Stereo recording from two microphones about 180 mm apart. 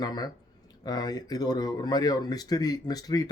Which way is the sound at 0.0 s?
20° left (ahead or behind).